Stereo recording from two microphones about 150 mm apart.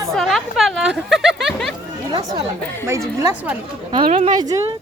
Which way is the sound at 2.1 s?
30° right (ahead or behind).